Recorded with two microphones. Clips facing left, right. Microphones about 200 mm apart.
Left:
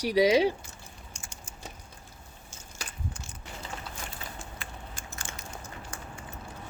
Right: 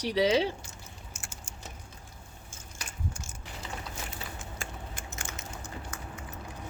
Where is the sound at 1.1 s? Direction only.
5° right (ahead or behind).